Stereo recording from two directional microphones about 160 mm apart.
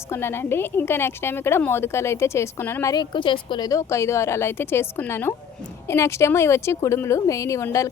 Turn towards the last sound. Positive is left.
turn(degrees=20)  # may be behind; listen again after turning